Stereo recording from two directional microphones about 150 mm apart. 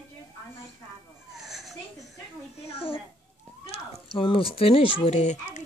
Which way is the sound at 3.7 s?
40° left (ahead or behind).